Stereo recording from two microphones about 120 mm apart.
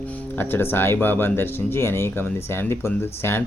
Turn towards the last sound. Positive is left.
turn(degrees=20)  # may be behind; listen again after turning